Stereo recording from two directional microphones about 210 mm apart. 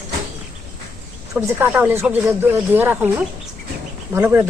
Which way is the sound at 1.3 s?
10° right (ahead or behind).